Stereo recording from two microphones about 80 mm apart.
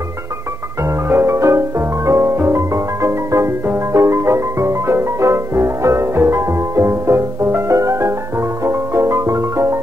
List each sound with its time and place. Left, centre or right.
1.0 s music: right